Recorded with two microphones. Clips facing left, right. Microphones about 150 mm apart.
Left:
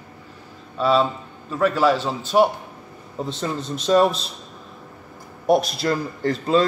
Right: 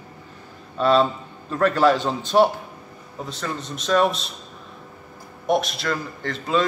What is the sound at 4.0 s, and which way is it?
Speech, centre (ahead or behind).